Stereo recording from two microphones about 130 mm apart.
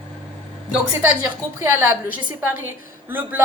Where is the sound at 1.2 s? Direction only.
20° right (ahead or behind).